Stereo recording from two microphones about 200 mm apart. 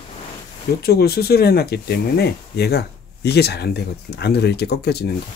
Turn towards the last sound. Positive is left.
turn(degrees=55)  # may be behind; listen again after turning